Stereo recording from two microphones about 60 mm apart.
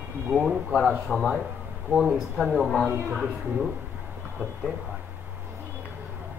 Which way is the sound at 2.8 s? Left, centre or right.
Right.